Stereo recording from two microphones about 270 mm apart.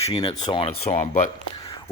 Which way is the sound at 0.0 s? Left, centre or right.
Centre.